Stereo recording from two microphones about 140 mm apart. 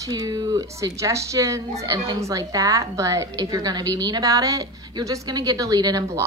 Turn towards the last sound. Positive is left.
turn(degrees=-30)  # may be behind; listen again after turning